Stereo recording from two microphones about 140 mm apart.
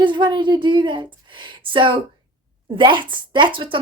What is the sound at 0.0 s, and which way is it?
A woman's voice, 35° right (ahead or behind).